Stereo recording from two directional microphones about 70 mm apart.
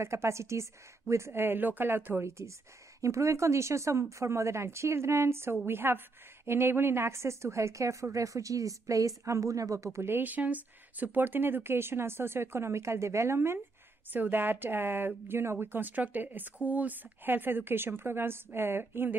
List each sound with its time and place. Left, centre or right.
0.0 s a woman's voice: right
1.4 s a woman's voice: right
9.9 s speech: right
14.1 s speech: right